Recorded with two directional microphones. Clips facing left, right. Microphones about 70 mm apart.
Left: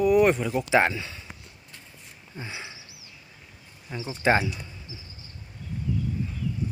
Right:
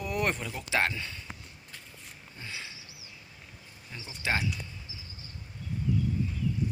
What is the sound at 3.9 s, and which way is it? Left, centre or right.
Speech, left.